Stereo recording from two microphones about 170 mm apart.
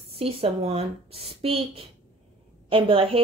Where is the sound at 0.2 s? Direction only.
35° right (ahead or behind).